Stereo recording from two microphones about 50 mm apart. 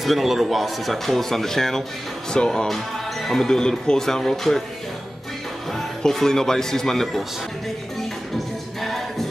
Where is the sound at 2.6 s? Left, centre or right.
Centre.